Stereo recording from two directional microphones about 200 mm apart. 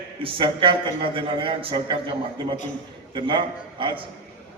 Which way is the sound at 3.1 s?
25° right (ahead or behind).